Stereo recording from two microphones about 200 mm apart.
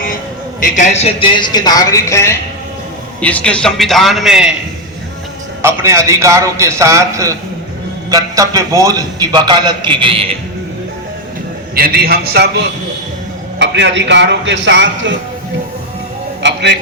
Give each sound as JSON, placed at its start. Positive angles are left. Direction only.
{"t": 0.6, "sound": "a woman's voice", "side_deg": 35}
{"t": 5.6, "sound": "a man's voice", "side_deg": -15}
{"t": 11.7, "sound": "a man's voice", "side_deg": -50}
{"t": 13.6, "sound": "a man's voice", "side_deg": -60}
{"t": 16.4, "sound": "a man's voice", "side_deg": -60}